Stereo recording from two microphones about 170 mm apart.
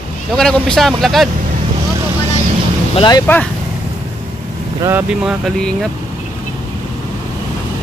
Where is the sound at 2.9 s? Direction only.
25° left (ahead or behind).